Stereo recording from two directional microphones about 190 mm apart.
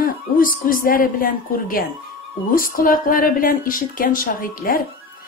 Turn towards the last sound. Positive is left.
turn(degrees=45)  # may be behind; listen again after turning